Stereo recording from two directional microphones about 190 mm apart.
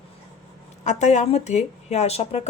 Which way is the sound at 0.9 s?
40° left (ahead or behind).